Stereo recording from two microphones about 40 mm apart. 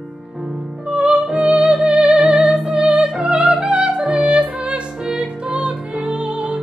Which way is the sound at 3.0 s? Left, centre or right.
Centre.